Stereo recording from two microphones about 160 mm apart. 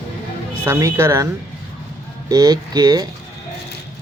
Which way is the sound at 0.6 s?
15° right (ahead or behind).